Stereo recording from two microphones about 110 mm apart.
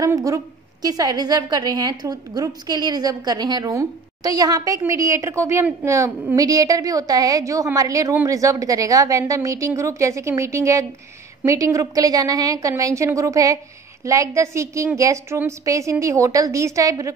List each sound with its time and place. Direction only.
0.0 s a woman's voice: 30° right (ahead or behind)